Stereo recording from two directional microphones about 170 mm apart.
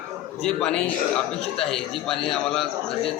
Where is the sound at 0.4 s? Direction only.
5° left (ahead or behind).